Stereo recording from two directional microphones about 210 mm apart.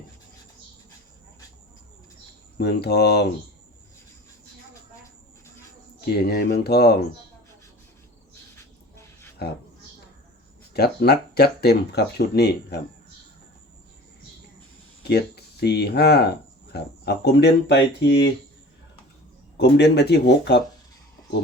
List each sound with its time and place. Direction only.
2.6 s speech: 50° left (ahead or behind)
6.1 s speech: 50° left (ahead or behind)
8.5 s dog: 10° left (ahead or behind)
10.8 s speech: 50° left (ahead or behind)
15.0 s speech: 50° left (ahead or behind)
19.5 s speech: 55° left (ahead or behind)